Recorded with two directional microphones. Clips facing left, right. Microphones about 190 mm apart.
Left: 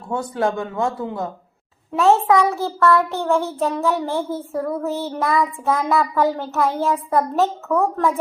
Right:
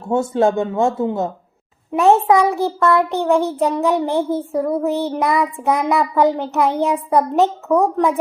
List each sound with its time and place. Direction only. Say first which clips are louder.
0.0 s a child's voice: right 6 dB; 25° right (ahead or behind)